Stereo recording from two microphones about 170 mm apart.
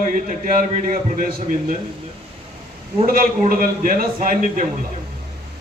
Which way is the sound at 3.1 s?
55° right (ahead or behind).